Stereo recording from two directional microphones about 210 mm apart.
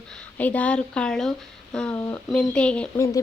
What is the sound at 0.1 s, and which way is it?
A woman's voice, 5° left (ahead or behind).